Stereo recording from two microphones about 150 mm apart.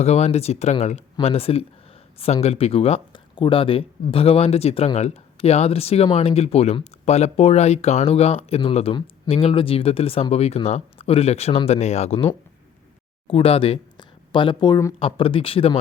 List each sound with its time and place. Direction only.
0.0 s speech: 45° left (ahead or behind); by 14.9 s 25° left (ahead or behind)
14.9 s speech: 40° left (ahead or behind)